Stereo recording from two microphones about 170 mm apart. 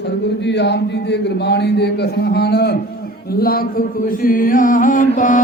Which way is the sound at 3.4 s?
60° left (ahead or behind).